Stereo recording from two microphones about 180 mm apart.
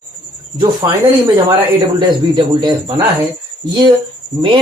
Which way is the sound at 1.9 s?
30° right (ahead or behind).